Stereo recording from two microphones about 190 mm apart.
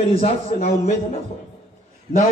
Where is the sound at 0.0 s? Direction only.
35° left (ahead or behind).